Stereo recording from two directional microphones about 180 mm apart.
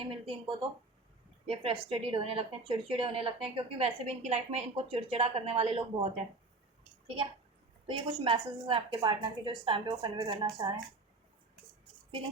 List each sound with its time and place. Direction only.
0.0 s a woman's voice: 25° right (ahead or behind)
7.9 s a woman's voice: 30° right (ahead or behind)